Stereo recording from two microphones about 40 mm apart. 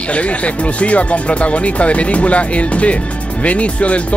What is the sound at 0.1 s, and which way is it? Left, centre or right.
Speech, left.